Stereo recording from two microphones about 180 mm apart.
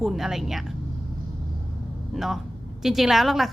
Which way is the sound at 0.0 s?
Centre (ahead or behind).